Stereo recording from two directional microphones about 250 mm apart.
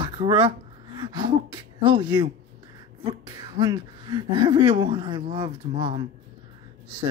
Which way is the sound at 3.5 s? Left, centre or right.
Centre.